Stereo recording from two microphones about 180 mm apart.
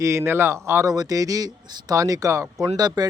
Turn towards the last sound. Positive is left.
turn(degrees=-20)  # may be behind; listen again after turning